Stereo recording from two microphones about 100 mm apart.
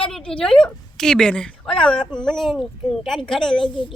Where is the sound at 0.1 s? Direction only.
10° left (ahead or behind).